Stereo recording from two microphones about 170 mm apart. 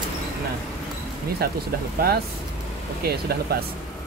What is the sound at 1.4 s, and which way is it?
Speech, 65° right (ahead or behind).